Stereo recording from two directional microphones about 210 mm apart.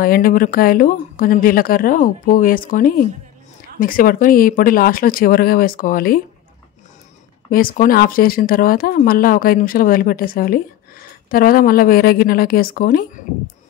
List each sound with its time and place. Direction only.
0.0 s speech: 45° left (ahead or behind)
7.5 s speech: 40° left (ahead or behind)